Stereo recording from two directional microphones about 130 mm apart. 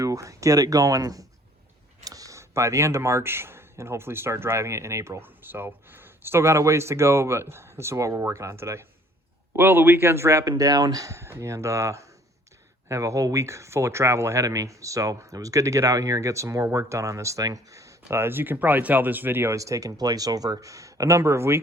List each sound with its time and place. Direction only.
0.0 s speech: 25° right (ahead or behind)